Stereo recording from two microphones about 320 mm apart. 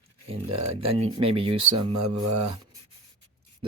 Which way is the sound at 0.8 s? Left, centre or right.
Centre.